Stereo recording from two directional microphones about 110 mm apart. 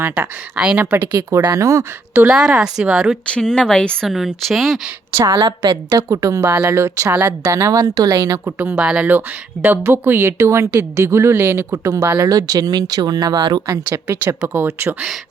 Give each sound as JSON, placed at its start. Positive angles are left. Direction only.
{"t": 0.0, "sound": "speech", "side_deg": -10}
{"t": 1.4, "sound": "speech", "side_deg": -35}
{"t": 2.2, "sound": "speech", "side_deg": -5}
{"t": 3.3, "sound": "speech", "side_deg": 10}
{"t": 4.0, "sound": "speech", "side_deg": 0}
{"t": 5.3, "sound": "a woman's voice", "side_deg": -40}
{"t": 8.5, "sound": "speech", "side_deg": -10}
{"t": 13.9, "sound": "speech", "side_deg": -25}